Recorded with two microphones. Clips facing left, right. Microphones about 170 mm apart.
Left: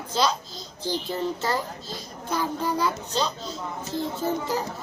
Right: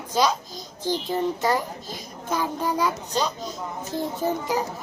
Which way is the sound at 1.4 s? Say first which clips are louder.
Right 4 dB; 15° right (ahead or behind).